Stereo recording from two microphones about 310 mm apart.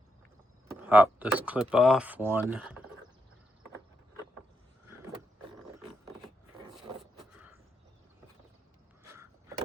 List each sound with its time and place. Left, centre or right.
0.7 s speech: centre
7.2 s crow: centre